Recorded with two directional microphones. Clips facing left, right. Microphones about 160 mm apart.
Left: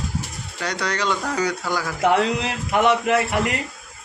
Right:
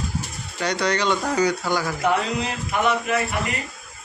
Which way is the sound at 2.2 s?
85° left.